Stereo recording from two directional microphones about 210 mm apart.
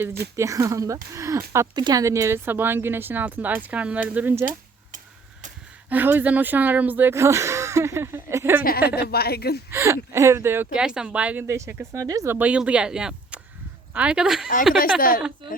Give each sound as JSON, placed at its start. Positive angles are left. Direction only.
{"t": 0.3, "sound": "speech", "side_deg": -15}
{"t": 5.9, "sound": "speech", "side_deg": -10}
{"t": 9.0, "sound": "a woman's voice", "side_deg": 50}
{"t": 9.7, "sound": "speech", "side_deg": -10}
{"t": 14.8, "sound": "a woman's voice", "side_deg": 45}